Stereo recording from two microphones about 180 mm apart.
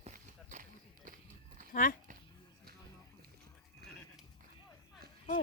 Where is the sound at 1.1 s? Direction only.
50° right (ahead or behind).